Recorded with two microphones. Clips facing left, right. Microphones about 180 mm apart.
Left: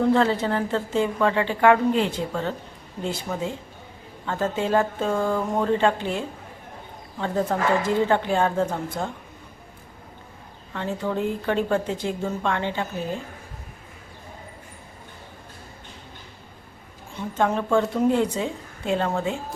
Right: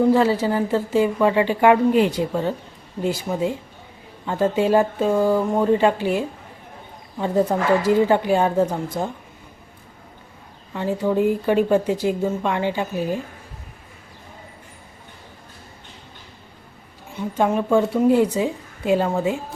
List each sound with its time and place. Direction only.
0.0 s a woman's voice: 5° right (ahead or behind)
10.8 s a woman's voice: 10° right (ahead or behind)
17.2 s a woman's voice: 10° right (ahead or behind)